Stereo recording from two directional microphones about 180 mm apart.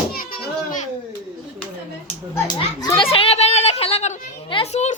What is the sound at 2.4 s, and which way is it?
Children playing, 20° left (ahead or behind).